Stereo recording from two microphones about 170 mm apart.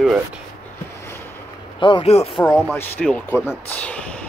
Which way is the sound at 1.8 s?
30° left (ahead or behind).